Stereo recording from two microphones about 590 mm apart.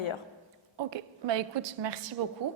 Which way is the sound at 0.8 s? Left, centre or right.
Right.